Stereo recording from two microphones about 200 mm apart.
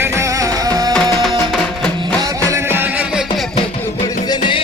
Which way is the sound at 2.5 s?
15° right (ahead or behind).